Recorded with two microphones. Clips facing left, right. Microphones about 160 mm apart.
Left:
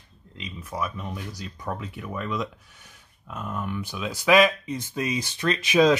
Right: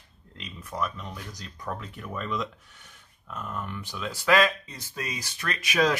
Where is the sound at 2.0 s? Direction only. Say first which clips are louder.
Left 1 dB; 5° left (ahead or behind).